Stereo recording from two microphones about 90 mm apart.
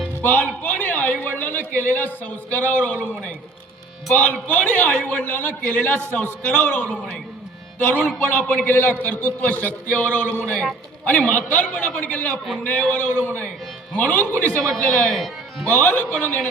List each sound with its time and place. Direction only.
0.2 s a man's voice: 20° left (ahead or behind)
8.4 s a man's voice: 20° left (ahead or behind)
14.7 s speech: 10° left (ahead or behind)
15.6 s a man's voice: 20° left (ahead or behind)